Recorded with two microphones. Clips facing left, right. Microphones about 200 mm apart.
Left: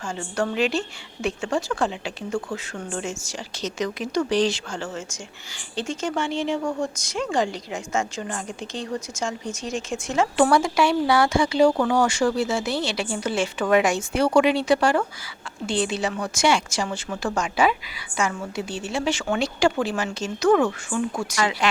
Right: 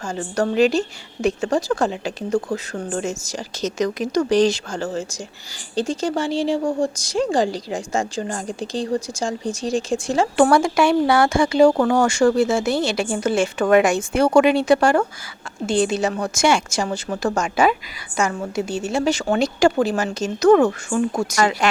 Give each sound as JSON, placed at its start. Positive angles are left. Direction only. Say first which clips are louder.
{"t": 0.1, "sound": "a woman's voice", "louder": "right 5 dB", "side_deg": -40}
{"t": 10.3, "sound": "a woman's voice", "louder": "right 4 dB", "side_deg": -50}